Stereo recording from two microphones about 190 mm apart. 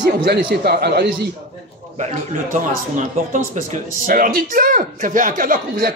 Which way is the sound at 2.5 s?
40° right (ahead or behind).